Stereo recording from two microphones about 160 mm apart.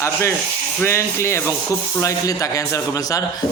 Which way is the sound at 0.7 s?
15° left (ahead or behind).